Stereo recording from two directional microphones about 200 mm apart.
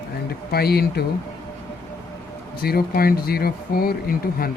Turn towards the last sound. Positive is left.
turn(degrees=50)  # may be behind; listen again after turning